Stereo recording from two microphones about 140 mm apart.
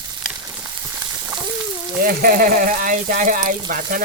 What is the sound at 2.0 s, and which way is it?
Speech, 90° right.